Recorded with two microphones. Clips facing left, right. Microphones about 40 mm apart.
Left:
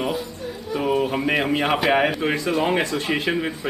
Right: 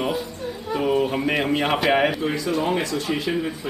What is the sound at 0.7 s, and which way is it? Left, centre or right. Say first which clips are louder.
A woman's voice: even; centre.